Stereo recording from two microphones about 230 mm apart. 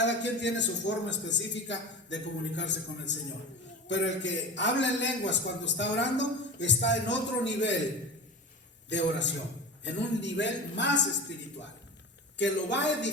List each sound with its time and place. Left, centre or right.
0.0 s a man's voice: left
8.9 s a man's voice: left
12.4 s a man's voice: left